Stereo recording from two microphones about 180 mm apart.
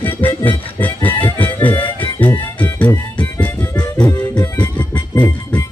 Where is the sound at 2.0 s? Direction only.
10° left (ahead or behind).